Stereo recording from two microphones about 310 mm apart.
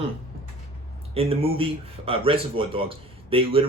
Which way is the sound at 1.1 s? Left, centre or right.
Centre.